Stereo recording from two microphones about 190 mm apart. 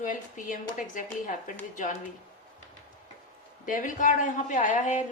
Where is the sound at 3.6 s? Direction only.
45° left (ahead or behind).